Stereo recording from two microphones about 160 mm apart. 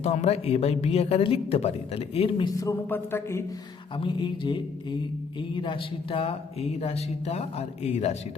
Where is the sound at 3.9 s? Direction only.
30° left (ahead or behind).